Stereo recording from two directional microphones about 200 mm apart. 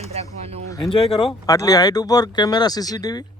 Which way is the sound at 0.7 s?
25° left (ahead or behind).